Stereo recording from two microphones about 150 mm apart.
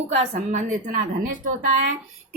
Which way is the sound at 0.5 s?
65° right (ahead or behind).